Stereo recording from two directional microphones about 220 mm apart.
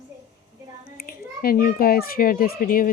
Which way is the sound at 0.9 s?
40° left (ahead or behind).